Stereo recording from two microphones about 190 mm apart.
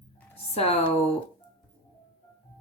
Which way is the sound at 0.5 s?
30° left (ahead or behind).